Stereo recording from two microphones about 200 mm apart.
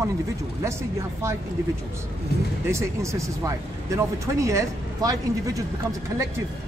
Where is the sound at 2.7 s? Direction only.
15° right (ahead or behind).